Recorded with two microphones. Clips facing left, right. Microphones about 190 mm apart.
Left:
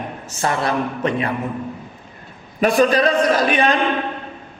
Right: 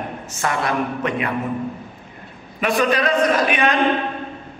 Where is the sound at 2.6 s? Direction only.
35° left (ahead or behind).